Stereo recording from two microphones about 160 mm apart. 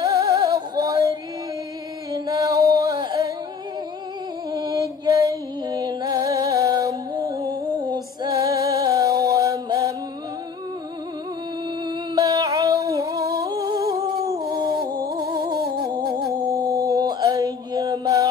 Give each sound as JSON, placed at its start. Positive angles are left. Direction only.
{"t": 0.0, "sound": "music", "side_deg": -20}
{"t": 2.1, "sound": "music", "side_deg": -20}
{"t": 4.5, "sound": "music", "side_deg": -25}
{"t": 12.2, "sound": "music", "side_deg": -20}
{"t": 15.7, "sound": "humming", "side_deg": -25}
{"t": 16.4, "sound": "mantra", "side_deg": -20}